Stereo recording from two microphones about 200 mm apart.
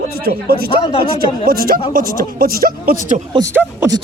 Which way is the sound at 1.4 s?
45° right (ahead or behind).